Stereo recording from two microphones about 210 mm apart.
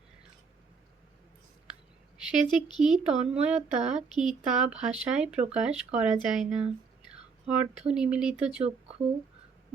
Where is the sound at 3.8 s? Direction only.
35° right (ahead or behind).